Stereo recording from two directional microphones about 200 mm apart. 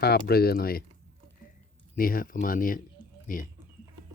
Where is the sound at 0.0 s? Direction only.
50° left (ahead or behind).